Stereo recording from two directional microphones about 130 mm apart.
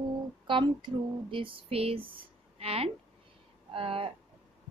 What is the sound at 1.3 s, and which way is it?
Speech, 40° right (ahead or behind).